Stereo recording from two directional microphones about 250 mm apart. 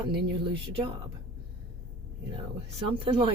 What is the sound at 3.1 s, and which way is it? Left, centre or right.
Speech, centre.